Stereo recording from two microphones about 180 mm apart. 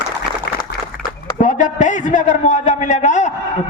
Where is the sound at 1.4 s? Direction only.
45° left (ahead or behind).